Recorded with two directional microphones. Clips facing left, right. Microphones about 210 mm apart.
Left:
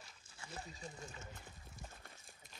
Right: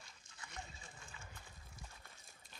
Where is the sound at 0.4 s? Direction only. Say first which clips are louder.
Left 4 dB; 35° left (ahead or behind).